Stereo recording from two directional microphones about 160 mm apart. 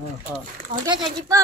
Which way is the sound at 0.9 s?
25° right (ahead or behind).